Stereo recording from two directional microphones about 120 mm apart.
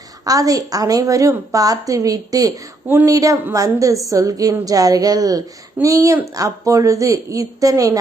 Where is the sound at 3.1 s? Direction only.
30° right (ahead or behind).